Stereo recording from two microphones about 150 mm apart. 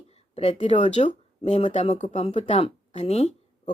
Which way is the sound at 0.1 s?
40° left (ahead or behind).